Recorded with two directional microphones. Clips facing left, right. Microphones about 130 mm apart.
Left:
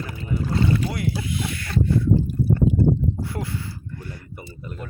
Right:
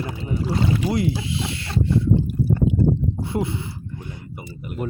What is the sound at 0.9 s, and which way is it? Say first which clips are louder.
Speech: right 4 dB; 25° right (ahead or behind).